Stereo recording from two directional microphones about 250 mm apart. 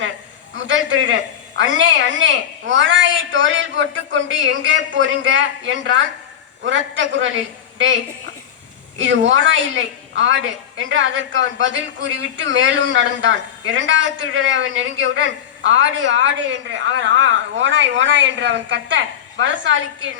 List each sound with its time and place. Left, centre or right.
0.5 s a woman's voice: right